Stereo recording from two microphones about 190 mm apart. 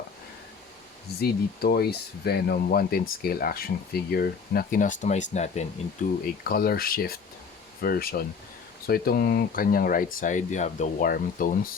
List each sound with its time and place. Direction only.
1.2 s speech: 55° left (ahead or behind)